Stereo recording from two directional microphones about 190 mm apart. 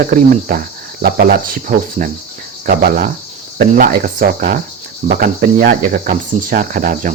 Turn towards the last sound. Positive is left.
turn(degrees=-45)  # may be behind; listen again after turning